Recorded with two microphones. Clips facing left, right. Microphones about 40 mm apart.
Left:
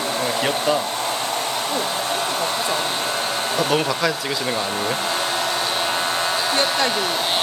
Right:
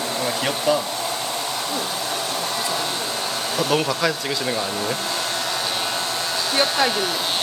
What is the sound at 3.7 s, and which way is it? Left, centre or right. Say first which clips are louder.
Speech: right 2 dB; centre.